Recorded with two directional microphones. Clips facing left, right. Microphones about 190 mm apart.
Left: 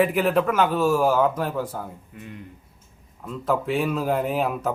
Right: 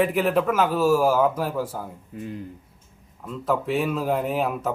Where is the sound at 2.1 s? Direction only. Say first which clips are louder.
Right 6 dB; 35° right (ahead or behind).